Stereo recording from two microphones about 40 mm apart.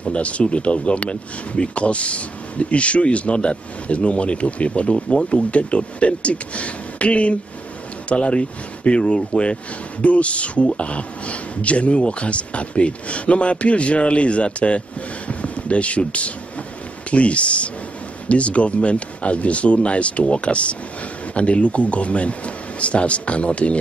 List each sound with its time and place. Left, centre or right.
0.0 s speech: left
15.2 s a sound: left
17.1 s speech: left